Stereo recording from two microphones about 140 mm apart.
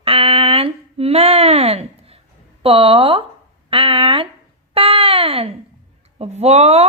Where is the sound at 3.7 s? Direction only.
40° right (ahead or behind).